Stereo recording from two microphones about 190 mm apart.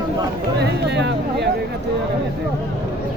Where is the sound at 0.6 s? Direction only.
65° right (ahead or behind).